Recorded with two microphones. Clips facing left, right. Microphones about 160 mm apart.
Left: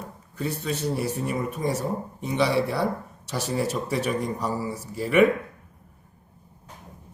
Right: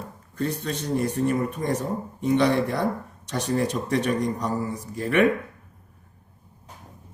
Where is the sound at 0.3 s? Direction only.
10° left (ahead or behind).